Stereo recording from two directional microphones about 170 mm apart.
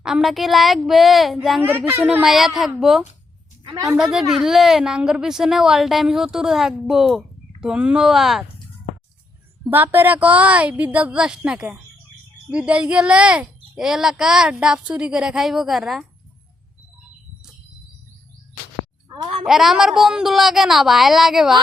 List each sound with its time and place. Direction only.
0.0 s a woman's voice: centre (ahead or behind)
1.6 s a woman's voice: 15° right (ahead or behind)
3.6 s a woman's voice: 25° right (ahead or behind)
3.9 s a woman's voice: centre (ahead or behind)
9.6 s a woman's voice: 10° right (ahead or behind)
19.0 s a sound: 25° right (ahead or behind)
19.5 s a woman's voice: centre (ahead or behind)